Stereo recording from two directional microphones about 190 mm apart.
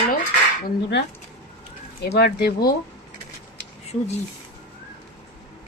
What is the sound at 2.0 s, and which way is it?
Speech, 55° left (ahead or behind).